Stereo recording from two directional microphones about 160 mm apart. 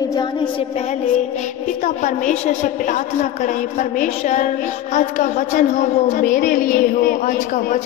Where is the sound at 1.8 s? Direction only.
50° left (ahead or behind).